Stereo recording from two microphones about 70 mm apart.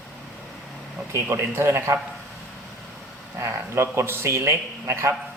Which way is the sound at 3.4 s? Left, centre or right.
Right.